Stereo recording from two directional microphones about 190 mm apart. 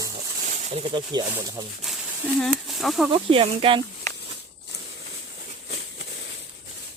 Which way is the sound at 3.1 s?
30° right (ahead or behind).